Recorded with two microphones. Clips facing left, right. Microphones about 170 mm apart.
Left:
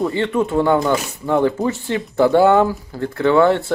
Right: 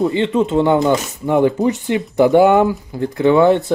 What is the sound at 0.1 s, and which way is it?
Speech, 20° right (ahead or behind).